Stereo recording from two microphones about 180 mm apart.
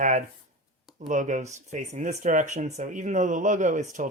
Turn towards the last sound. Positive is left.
turn(degrees=-45)  # may be behind; listen again after turning